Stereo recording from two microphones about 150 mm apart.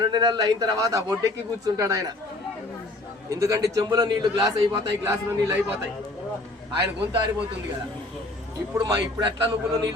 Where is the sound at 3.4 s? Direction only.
20° right (ahead or behind).